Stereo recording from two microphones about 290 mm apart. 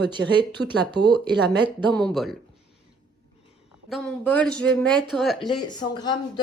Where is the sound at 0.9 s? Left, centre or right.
Centre.